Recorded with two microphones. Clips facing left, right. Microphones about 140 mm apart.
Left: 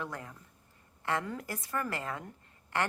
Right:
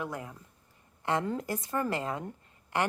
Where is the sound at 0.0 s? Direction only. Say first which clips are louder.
Right 3 dB; 15° right (ahead or behind).